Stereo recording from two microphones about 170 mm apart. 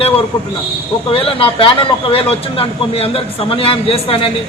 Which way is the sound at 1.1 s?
30° left (ahead or behind).